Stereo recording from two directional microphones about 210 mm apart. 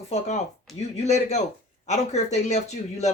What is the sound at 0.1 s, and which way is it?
A man's voice, 30° left (ahead or behind).